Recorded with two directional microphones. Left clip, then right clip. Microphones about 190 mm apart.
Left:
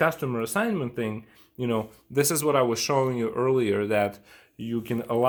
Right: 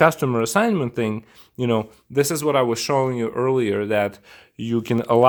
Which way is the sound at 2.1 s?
25° right (ahead or behind).